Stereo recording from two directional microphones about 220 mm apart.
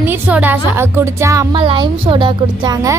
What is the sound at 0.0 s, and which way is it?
A woman's voice, 10° right (ahead or behind).